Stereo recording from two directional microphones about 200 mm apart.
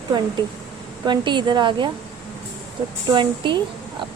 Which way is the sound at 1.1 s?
20° right (ahead or behind).